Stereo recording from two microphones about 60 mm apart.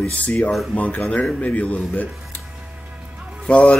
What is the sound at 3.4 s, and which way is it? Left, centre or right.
Speech, centre.